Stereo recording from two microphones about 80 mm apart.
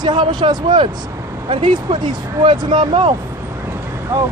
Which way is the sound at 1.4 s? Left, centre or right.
Right.